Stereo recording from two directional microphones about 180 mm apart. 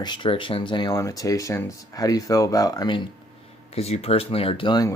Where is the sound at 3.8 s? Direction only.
35° left (ahead or behind).